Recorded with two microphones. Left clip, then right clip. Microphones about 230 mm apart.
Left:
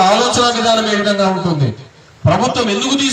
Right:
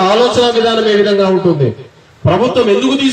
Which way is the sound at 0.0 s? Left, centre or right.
Left.